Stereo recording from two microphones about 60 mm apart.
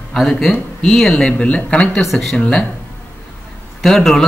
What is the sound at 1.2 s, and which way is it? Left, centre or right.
Speech, centre.